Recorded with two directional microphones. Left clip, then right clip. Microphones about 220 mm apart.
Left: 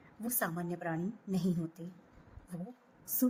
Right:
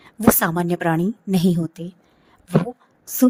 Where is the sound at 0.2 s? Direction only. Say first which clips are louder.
Right 19 dB; 45° right (ahead or behind).